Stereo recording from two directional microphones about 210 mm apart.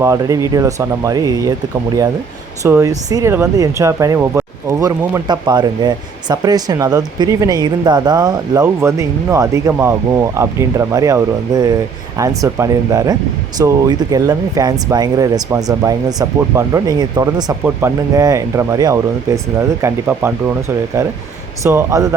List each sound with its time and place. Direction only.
0.0 s speech: 15° right (ahead or behind)
2.6 s speech: 15° right (ahead or behind)